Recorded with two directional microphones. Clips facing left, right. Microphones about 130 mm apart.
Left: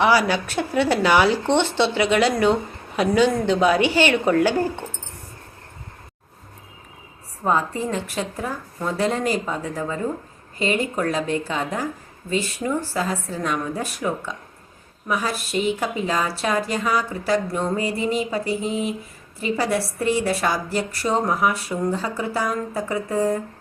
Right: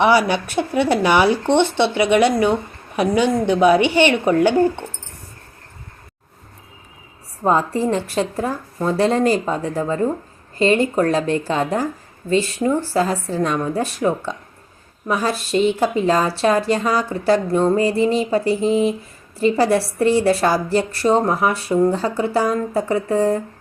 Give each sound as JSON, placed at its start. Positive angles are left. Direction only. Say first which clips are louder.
{"t": 0.0, "sound": "speech", "louder": "right 3 dB", "side_deg": -20}
{"t": 7.4, "sound": "a woman's voice", "louder": "right 5 dB", "side_deg": -30}